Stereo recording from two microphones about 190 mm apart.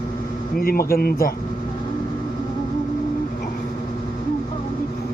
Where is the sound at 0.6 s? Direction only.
50° left (ahead or behind).